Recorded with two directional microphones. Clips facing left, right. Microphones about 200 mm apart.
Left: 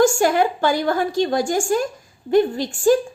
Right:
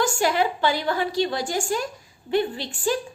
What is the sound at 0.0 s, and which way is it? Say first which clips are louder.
A woman's voice: left 6 dB; 45° left (ahead or behind).